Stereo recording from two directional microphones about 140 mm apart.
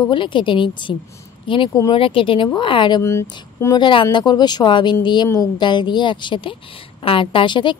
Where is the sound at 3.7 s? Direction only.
35° left (ahead or behind).